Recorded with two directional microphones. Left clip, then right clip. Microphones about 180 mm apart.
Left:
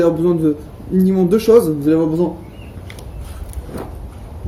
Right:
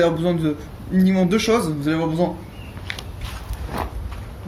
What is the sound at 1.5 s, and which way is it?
Speech, 40° right (ahead or behind).